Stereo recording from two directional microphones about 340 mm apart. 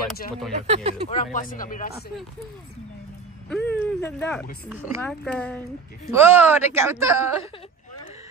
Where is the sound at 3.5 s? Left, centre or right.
Centre.